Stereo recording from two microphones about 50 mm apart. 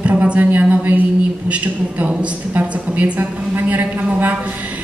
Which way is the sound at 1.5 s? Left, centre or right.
Right.